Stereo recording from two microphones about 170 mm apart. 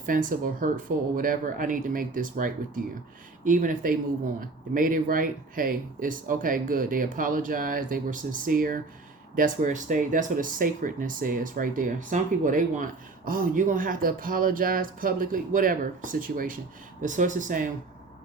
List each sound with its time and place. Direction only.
0.0 s speech: 50° right (ahead or behind)